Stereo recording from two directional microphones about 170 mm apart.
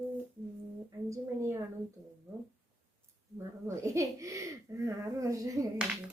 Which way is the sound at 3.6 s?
15° right (ahead or behind).